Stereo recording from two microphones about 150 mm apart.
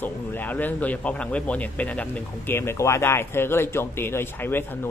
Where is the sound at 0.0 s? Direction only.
10° left (ahead or behind).